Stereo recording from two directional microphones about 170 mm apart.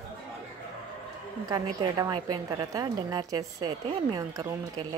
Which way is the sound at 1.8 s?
25° right (ahead or behind).